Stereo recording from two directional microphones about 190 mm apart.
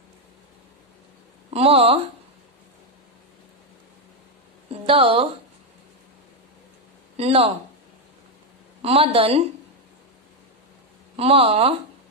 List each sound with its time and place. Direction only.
1.5 s speech: 30° right (ahead or behind)
4.8 s speech: 30° right (ahead or behind)
7.2 s a woman's voice: 30° right (ahead or behind)
8.8 s a woman's voice: 30° right (ahead or behind)
11.1 s a woman's voice: 30° right (ahead or behind)